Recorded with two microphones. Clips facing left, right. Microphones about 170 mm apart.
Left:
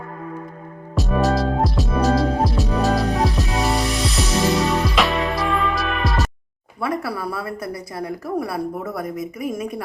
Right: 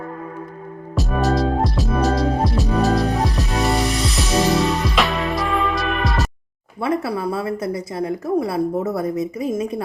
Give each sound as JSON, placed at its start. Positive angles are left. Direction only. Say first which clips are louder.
{"t": 0.9, "sound": "music", "louder": "even", "side_deg": 0}
{"t": 6.8, "sound": "a woman's voice", "louder": "right 3 dB", "side_deg": -25}